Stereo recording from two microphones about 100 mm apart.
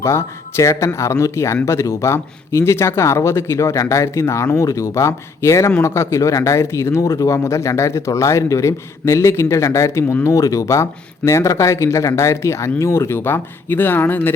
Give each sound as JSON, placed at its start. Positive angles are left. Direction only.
{"t": 0.0, "sound": "speech", "side_deg": 25}